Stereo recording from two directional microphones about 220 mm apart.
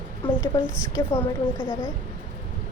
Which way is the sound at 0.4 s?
20° left (ahead or behind).